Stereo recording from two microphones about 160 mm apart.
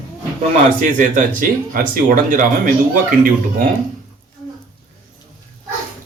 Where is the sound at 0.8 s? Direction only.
55° right (ahead or behind).